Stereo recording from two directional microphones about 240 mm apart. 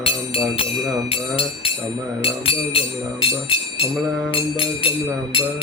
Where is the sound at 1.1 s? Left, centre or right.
Left.